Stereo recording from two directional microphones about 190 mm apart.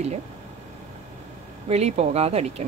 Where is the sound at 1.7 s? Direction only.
35° right (ahead or behind).